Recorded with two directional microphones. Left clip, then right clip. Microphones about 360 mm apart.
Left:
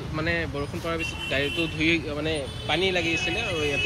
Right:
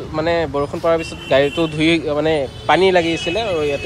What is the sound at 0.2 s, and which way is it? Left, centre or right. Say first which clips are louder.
Speech: right 10 dB; centre.